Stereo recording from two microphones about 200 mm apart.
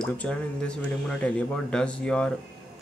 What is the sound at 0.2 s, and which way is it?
Speech, 5° left (ahead or behind).